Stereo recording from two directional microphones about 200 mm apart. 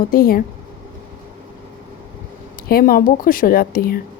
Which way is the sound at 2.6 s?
45° left (ahead or behind).